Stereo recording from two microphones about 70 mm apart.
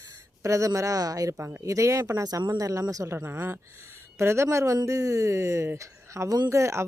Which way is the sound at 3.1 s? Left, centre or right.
Right.